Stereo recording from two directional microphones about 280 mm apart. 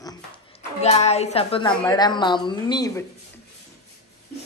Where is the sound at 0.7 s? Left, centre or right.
Left.